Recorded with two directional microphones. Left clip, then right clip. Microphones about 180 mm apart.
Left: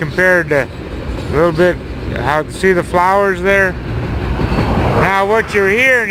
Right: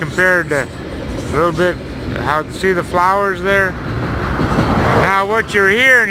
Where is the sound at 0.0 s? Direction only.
10° left (ahead or behind).